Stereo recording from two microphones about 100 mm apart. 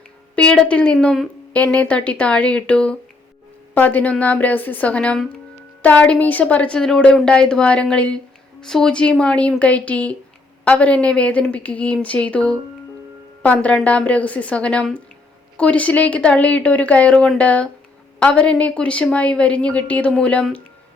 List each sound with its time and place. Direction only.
0.3 s a sound: 10° left (ahead or behind)
1.0 s speech: centre (ahead or behind)
1.5 s a woman's voice: 15° left (ahead or behind)